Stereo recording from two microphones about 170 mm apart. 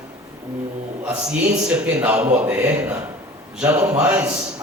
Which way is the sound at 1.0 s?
5° right (ahead or behind).